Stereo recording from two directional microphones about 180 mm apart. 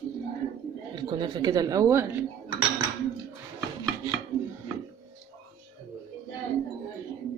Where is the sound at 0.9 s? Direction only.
25° right (ahead or behind).